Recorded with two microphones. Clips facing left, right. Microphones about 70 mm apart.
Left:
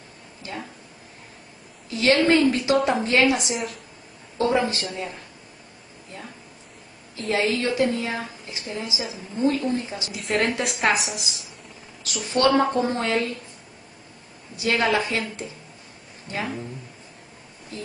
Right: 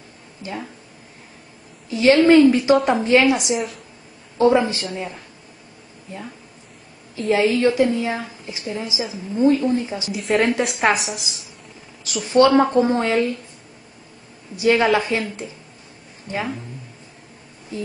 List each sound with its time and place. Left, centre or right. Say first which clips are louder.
1.9 s speech: right 6 dB; right
2.7 s a woman's voice: right 4 dB; centre
3.0 s speech: right 4 dB; right
3.5 s a woman's voice: right 5 dB; centre
4.4 s speech: right 6 dB; right
7.3 s speech: right 5 dB; right
10.1 s a woman's voice: right 5 dB; centre
12.1 s speech: right 6 dB; right
14.6 s speech: right 5 dB; right